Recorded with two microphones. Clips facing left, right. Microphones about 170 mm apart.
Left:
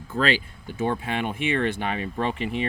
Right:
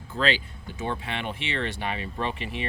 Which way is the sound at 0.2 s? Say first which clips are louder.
Left 2 dB; 45° left (ahead or behind).